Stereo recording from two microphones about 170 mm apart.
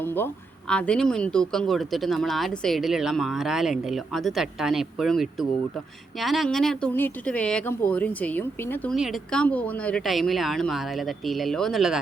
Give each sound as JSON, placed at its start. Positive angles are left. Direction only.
{"t": 0.0, "sound": "a sound", "side_deg": 10}
{"t": 0.7, "sound": "speech", "side_deg": 5}
{"t": 9.0, "sound": "speech", "side_deg": 0}